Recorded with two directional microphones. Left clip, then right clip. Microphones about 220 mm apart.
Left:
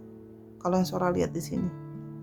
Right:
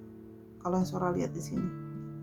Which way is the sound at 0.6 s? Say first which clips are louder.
Left 5 dB; 30° left (ahead or behind).